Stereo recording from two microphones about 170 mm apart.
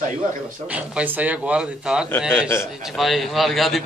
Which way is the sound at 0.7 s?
5° right (ahead or behind).